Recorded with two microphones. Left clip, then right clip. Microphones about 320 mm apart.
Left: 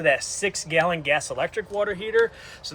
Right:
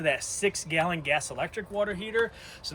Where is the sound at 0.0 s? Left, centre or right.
Left.